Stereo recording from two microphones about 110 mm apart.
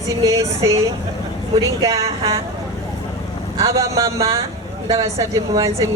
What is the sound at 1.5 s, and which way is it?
Speech, 30° right (ahead or behind).